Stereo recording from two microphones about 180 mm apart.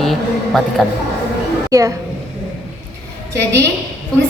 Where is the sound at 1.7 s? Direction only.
20° right (ahead or behind).